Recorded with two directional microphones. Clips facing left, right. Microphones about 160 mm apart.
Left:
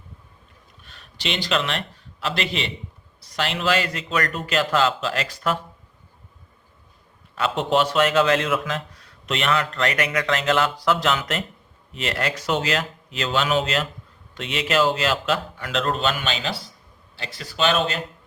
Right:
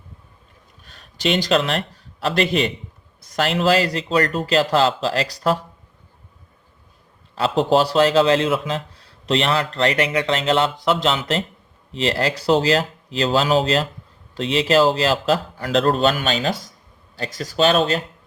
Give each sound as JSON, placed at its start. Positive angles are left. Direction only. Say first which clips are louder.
{"t": 0.8, "sound": "a man's voice", "louder": "right 9 dB", "side_deg": -40}
{"t": 7.3, "sound": "a man's voice", "louder": "right 4 dB", "side_deg": -35}